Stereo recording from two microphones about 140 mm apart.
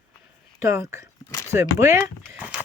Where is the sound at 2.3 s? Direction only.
5° right (ahead or behind).